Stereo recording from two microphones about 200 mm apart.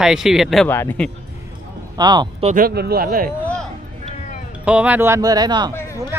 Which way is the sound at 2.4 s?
40° right (ahead or behind).